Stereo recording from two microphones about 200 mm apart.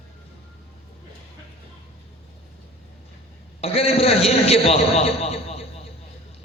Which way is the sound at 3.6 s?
30° left (ahead or behind).